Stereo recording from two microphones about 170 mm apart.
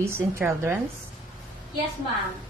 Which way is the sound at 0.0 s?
15° right (ahead or behind).